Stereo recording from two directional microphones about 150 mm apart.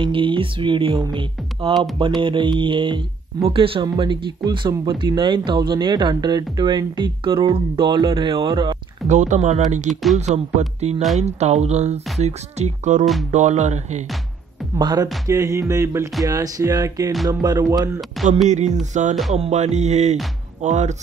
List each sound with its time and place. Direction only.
0.0 s speech: 35° right (ahead or behind)
9.1 s speech: 55° right (ahead or behind)
13.0 s speech: centre (ahead or behind)
13.3 s speech: 50° right (ahead or behind)
14.8 s speech: 25° right (ahead or behind)
18.5 s speech: 50° right (ahead or behind)